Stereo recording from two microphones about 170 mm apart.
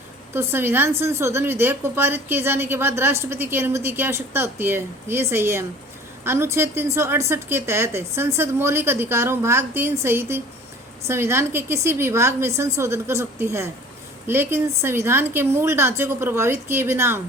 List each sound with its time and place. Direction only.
0.3 s a woman's voice: 15° right (ahead or behind)